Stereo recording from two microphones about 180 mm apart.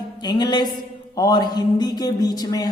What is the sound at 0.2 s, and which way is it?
A woman's voice, 25° left (ahead or behind).